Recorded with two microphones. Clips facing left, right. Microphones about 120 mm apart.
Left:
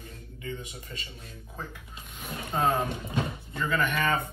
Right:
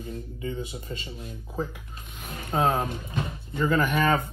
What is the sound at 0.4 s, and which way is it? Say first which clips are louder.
Speech: right 3 dB; 30° right (ahead or behind).